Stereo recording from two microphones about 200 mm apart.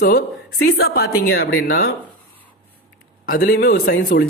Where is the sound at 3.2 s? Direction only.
45° left (ahead or behind).